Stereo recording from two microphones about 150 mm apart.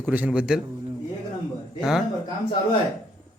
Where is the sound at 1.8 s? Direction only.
5° right (ahead or behind).